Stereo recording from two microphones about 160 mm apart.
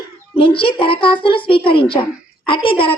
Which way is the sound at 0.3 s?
35° left (ahead or behind).